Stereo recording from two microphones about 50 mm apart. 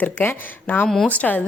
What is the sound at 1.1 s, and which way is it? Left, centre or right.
Speech, left.